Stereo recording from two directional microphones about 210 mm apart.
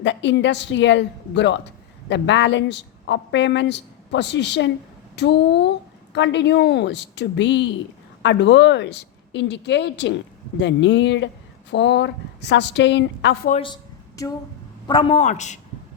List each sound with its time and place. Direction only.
0.0 s a woman's voice: 60° left (ahead or behind)
14.2 s a man's voice: 15° left (ahead or behind); by 15.5 s 35° left (ahead or behind)